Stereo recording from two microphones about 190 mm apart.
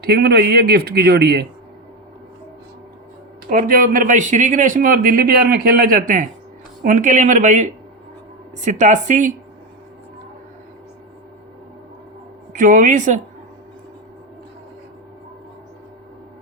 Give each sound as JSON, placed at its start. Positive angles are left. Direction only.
{"t": 0.0, "sound": "speech", "side_deg": -55}
{"t": 3.5, "sound": "speech", "side_deg": -45}
{"t": 12.5, "sound": "speech", "side_deg": -45}